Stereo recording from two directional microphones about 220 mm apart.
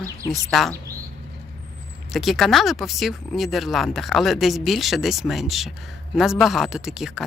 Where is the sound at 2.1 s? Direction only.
Centre (ahead or behind).